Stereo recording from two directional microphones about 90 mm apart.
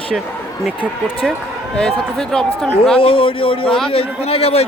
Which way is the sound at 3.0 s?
90° left.